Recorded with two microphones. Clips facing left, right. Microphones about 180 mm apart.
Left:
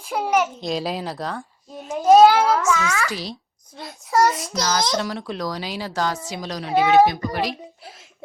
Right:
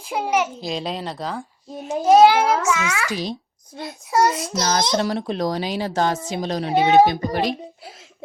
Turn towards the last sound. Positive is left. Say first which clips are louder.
# right 1 dB
turn(degrees=-25)  # may be behind; listen again after turning